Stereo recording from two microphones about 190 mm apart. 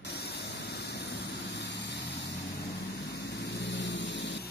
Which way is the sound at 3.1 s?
60° left (ahead or behind).